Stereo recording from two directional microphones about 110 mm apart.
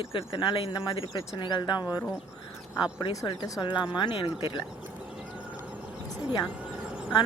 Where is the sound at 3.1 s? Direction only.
30° left (ahead or behind); by 4.6 s 50° left (ahead or behind).